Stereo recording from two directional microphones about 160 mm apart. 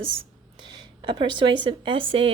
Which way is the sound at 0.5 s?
25° right (ahead or behind).